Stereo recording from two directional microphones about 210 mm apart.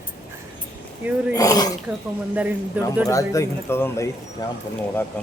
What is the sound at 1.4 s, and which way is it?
Speech, 15° left (ahead or behind).